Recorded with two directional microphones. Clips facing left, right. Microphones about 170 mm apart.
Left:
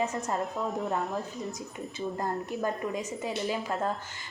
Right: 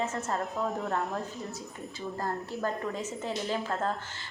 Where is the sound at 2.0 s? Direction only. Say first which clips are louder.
Left 2 dB; 20° left (ahead or behind).